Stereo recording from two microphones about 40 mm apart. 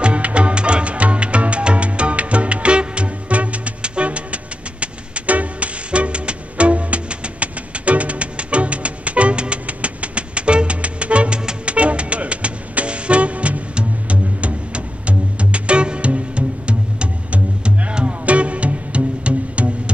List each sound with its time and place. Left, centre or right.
0.0 s music: right